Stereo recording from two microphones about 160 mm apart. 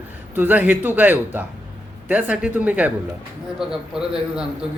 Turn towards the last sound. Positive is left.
turn(degrees=-5)  # may be behind; listen again after turning